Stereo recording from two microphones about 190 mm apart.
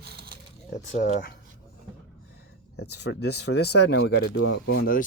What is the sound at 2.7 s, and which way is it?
Speech, 60° left (ahead or behind).